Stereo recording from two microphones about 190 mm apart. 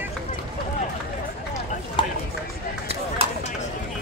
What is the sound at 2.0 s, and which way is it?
Run, 25° left (ahead or behind).